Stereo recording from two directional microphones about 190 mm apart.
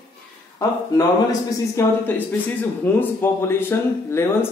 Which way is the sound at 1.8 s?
10° left (ahead or behind).